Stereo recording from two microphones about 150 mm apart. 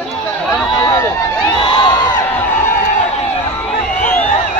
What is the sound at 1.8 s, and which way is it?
Crowd, 30° left (ahead or behind).